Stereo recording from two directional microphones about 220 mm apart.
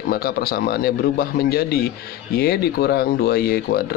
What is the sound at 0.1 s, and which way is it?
Speech, 45° left (ahead or behind).